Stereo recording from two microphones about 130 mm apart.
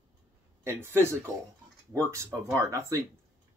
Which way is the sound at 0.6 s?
20° right (ahead or behind).